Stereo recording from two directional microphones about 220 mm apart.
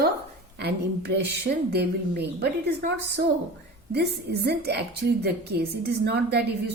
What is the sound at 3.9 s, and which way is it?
A woman's voice, 50° right (ahead or behind).